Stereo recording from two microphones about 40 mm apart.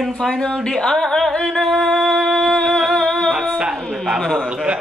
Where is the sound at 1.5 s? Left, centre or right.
Centre.